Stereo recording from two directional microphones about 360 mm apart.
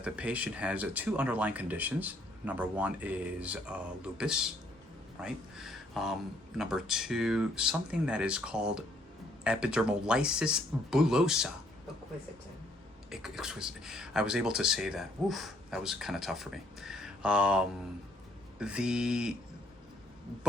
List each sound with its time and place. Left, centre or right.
0.0 s speech: centre
13.1 s speech: centre